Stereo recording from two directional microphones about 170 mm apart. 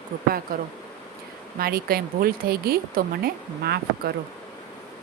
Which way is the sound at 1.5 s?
60° right (ahead or behind).